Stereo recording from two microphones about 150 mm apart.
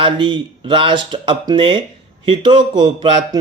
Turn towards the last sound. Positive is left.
turn(degrees=-35)  # may be behind; listen again after turning